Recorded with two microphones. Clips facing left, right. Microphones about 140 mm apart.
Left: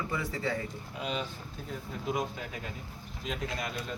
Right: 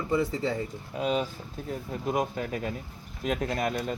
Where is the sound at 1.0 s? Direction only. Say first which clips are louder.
Right 8 dB; 45° right (ahead or behind).